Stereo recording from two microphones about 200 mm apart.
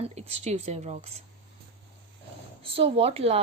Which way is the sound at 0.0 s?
30° right (ahead or behind).